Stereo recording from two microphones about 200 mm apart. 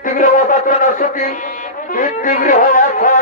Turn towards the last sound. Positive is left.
turn(degrees=40)  # may be behind; listen again after turning